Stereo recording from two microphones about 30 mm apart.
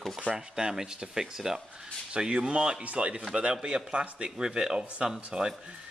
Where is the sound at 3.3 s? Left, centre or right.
Right.